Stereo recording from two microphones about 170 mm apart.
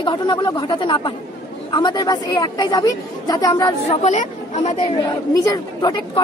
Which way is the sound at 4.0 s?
40° left (ahead or behind).